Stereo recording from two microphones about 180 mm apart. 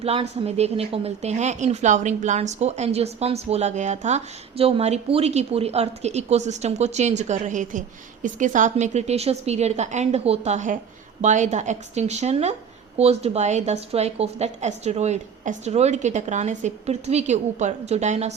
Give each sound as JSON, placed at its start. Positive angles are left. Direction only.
{"t": 0.0, "sound": "speech", "side_deg": -35}